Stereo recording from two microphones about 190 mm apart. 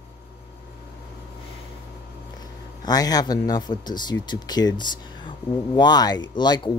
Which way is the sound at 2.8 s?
20° left (ahead or behind).